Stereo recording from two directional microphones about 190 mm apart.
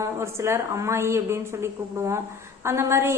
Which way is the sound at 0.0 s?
15° right (ahead or behind).